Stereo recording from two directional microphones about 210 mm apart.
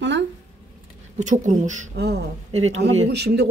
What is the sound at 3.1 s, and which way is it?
Speech, 55° right (ahead or behind).